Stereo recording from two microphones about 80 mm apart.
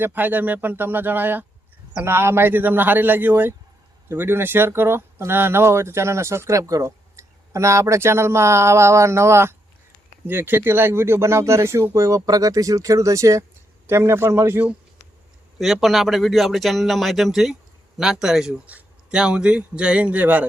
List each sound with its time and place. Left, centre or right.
0.0 s speech: right
15.5 s a man's voice: centre